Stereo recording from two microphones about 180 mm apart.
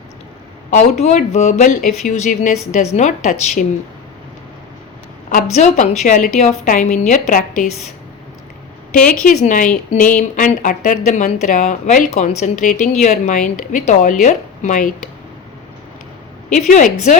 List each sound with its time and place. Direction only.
0.7 s a woman's voice: 40° left (ahead or behind)
5.3 s a woman's voice: 40° left (ahead or behind)
9.2 s a woman's voice: 45° left (ahead or behind)
16.5 s a woman's voice: 45° left (ahead or behind)